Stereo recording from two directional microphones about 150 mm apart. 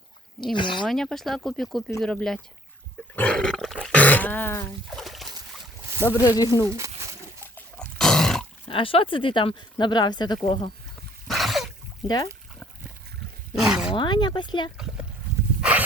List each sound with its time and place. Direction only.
0.5 s speech: 30° left (ahead or behind)
0.9 s speech: centre (ahead or behind)
3.2 s dog: 5° left (ahead or behind)
4.9 s splash: centre (ahead or behind)
6.1 s speech: 25° left (ahead or behind)
6.7 s a sound: 20° right (ahead or behind)
7.4 s pig: 10° left (ahead or behind)
7.9 s roar: 5° left (ahead or behind)
8.6 s speech: 35° left (ahead or behind)
11.3 s a sound: centre (ahead or behind)
12.0 s speech: 25° left (ahead or behind)
13.5 s roaring cats: 5° right (ahead or behind)
13.9 s speech: 30° left (ahead or behind)